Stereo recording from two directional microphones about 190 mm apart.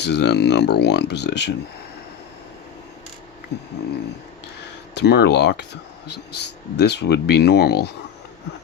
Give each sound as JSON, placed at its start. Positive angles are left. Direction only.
{"t": 0.0, "sound": "speech", "side_deg": 65}
{"t": 3.5, "sound": "speech", "side_deg": 60}
{"t": 4.9, "sound": "speech", "side_deg": 60}